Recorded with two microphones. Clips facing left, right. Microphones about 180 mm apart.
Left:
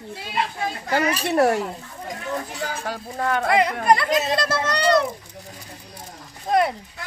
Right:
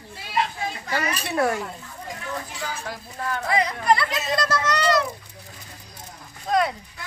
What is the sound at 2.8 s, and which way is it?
Speech, 70° left (ahead or behind).